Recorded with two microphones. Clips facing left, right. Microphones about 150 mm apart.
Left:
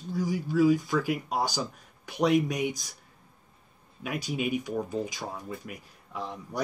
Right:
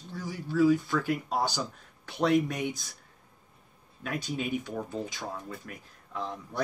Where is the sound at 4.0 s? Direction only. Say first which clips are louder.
Left 2 dB; 10° left (ahead or behind).